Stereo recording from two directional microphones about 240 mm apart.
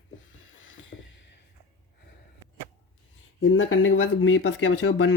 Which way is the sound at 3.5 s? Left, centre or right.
Left.